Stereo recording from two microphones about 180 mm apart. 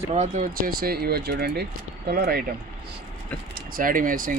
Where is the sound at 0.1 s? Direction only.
45° right (ahead or behind).